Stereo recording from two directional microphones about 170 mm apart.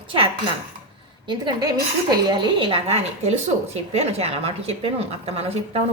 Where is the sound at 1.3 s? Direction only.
25° right (ahead or behind).